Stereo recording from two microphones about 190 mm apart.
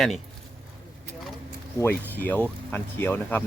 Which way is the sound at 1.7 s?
10° left (ahead or behind).